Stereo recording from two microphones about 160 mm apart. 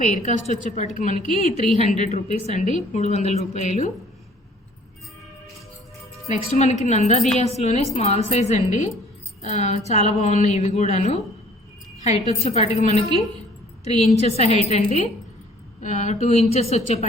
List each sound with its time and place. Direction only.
0.0 s a woman's voice: 50° left (ahead or behind)
1.3 s a woman's voice: 40° right (ahead or behind)
1.8 s a woman's voice: 45° left (ahead or behind)
6.2 s a woman's voice: 45° left (ahead or behind)
14.3 s a woman's voice: 45° left (ahead or behind)